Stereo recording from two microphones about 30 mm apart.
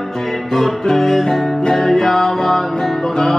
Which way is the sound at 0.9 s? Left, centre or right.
Centre.